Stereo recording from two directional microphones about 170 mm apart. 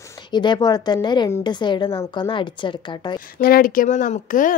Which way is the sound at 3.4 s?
60° left (ahead or behind).